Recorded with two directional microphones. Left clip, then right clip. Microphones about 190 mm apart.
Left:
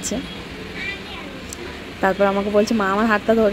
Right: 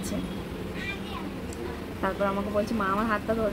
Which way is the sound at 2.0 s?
35° left (ahead or behind).